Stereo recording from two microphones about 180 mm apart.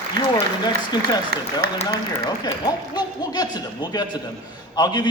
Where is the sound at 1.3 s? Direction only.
60° right (ahead or behind).